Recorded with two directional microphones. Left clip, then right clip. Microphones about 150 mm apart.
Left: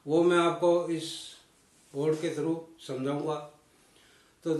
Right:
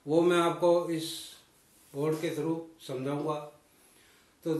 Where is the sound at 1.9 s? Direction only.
20° left (ahead or behind).